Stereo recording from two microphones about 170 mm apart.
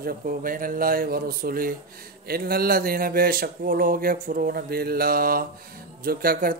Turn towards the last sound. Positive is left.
turn(degrees=-60)  # may be behind; listen again after turning